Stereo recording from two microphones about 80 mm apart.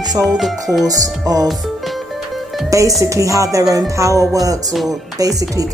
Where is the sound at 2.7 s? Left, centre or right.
Right.